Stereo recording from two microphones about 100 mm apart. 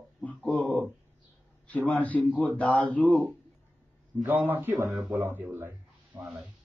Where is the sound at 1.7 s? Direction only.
15° left (ahead or behind).